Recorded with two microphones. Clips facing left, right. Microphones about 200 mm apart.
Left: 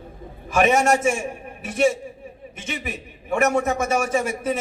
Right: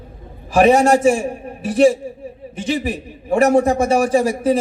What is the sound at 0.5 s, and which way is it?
A man's voice, 35° right (ahead or behind).